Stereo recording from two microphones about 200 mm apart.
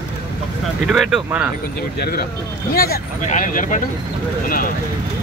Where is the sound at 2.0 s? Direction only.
50° left (ahead or behind).